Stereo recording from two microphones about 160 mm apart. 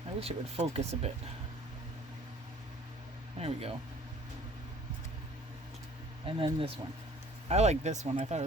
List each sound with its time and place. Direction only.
0.2 s speech: 40° right (ahead or behind)
3.3 s speech: 40° right (ahead or behind)
6.2 s speech: 35° right (ahead or behind)
7.4 s speech: 45° right (ahead or behind)